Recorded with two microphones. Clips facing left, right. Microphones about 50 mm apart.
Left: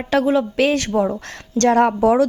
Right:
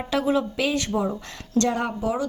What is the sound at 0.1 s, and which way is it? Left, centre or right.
Speech, left.